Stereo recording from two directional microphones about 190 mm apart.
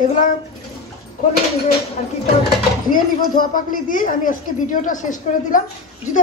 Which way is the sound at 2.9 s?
45° left (ahead or behind).